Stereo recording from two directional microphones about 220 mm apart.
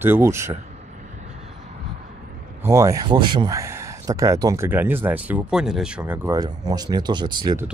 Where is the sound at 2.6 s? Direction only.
15° right (ahead or behind).